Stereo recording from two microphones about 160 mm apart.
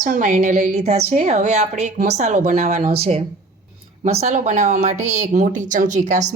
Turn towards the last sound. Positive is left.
turn(degrees=-50)  # may be behind; listen again after turning